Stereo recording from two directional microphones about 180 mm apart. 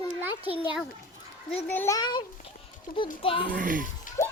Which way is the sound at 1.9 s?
25° left (ahead or behind).